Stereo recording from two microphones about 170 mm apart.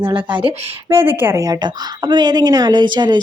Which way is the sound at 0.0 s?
30° right (ahead or behind).